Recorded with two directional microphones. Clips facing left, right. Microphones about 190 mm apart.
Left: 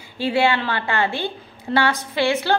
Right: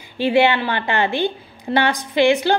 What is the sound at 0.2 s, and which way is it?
A woman's voice, 20° right (ahead or behind).